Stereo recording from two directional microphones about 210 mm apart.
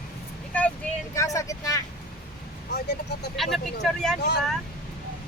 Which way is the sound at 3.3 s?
Centre (ahead or behind).